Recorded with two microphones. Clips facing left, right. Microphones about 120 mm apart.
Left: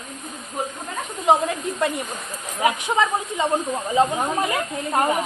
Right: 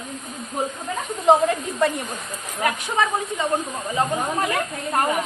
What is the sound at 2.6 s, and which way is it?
Speech, 15° left (ahead or behind).